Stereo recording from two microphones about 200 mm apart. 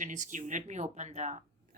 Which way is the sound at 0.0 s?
40° right (ahead or behind).